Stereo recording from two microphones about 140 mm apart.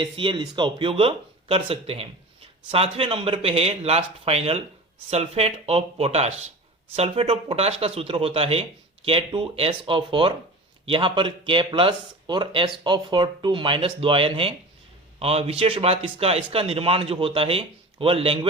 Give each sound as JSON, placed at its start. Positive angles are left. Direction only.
{"t": 0.0, "sound": "speech", "side_deg": -35}